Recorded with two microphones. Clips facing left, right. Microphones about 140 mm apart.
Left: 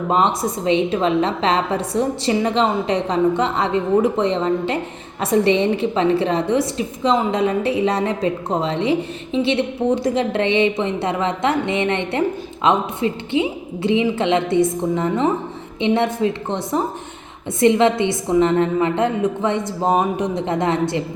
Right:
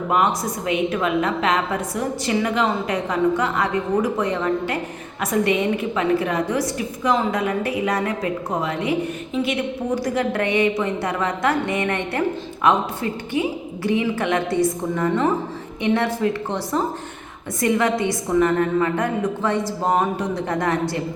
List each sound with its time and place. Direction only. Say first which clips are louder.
0.1 s a woman's voice: left 2 dB; 25° left (ahead or behind)